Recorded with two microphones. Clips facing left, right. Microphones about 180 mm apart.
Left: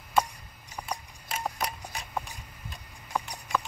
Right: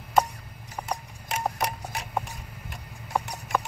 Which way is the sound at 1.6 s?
65° right (ahead or behind).